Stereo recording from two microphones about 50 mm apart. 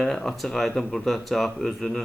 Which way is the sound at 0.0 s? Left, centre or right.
Centre.